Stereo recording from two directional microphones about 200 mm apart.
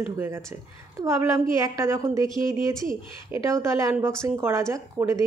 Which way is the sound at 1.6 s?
15° right (ahead or behind).